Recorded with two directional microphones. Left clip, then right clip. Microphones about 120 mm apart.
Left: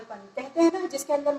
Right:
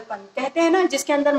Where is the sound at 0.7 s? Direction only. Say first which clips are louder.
Right 12 dB; 65° right (ahead or behind).